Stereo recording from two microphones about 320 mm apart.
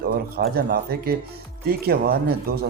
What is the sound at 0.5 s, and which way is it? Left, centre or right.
Speech, right.